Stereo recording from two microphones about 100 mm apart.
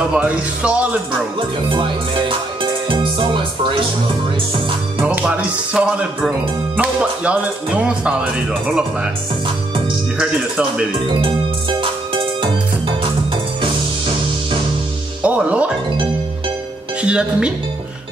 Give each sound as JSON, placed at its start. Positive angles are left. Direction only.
{"t": 0.1, "sound": "speech", "side_deg": -10}
{"t": 1.7, "sound": "speech", "side_deg": -55}
{"t": 5.0, "sound": "speech", "side_deg": -10}
{"t": 11.8, "sound": "music", "side_deg": -60}
{"t": 15.2, "sound": "music", "side_deg": -15}
{"t": 17.0, "sound": "speech", "side_deg": -10}